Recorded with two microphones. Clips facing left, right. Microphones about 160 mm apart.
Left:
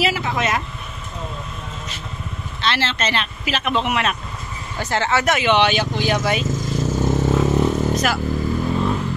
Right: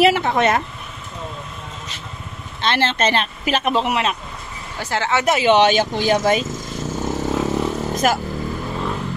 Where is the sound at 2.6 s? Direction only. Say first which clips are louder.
Right 4 dB; 50° right (ahead or behind); by 4.1 s 30° right (ahead or behind).